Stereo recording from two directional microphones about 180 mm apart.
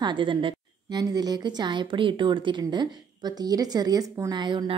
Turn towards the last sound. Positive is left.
turn(degrees=-25)  # may be behind; listen again after turning